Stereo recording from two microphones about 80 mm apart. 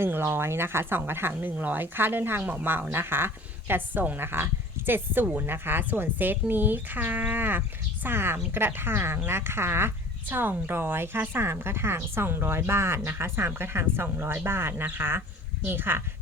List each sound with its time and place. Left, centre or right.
0.0 s speech: right